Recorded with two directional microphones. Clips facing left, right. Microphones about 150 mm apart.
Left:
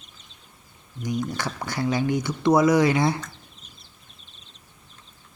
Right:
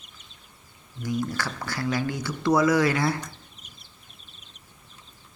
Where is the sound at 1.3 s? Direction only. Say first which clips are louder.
Left 2 dB; 20° left (ahead or behind).